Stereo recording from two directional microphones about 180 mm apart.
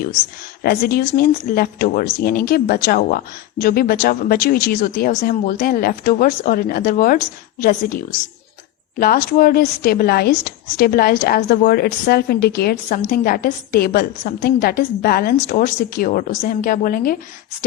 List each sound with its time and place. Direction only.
0.6 s a woman's voice: 55° left (ahead or behind)